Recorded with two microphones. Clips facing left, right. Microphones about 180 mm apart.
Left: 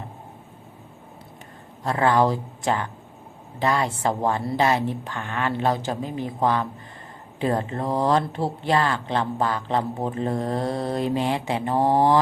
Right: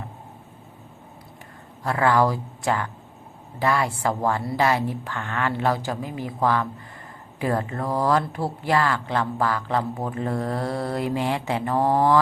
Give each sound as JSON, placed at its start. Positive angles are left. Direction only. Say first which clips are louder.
{"t": 1.8, "sound": "speech", "louder": "even", "side_deg": 20}